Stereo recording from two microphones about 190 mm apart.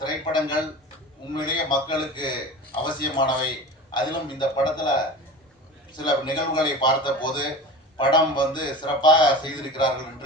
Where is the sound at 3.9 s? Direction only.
25° left (ahead or behind).